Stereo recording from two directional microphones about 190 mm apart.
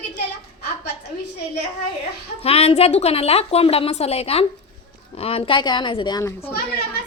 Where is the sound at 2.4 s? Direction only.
30° left (ahead or behind).